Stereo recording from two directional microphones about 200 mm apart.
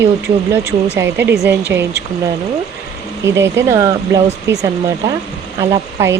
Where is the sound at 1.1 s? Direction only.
55° right (ahead or behind).